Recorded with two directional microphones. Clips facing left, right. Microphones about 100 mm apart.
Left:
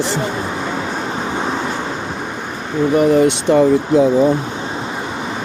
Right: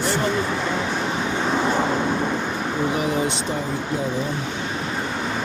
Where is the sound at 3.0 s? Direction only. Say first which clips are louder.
Left 10 dB; 65° left (ahead or behind).